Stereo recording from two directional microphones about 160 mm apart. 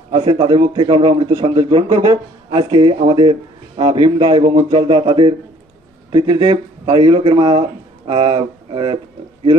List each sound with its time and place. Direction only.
0.1 s speech: 30° right (ahead or behind)